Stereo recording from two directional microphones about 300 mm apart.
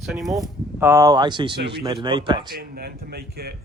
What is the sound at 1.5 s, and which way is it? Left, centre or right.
Speech, right.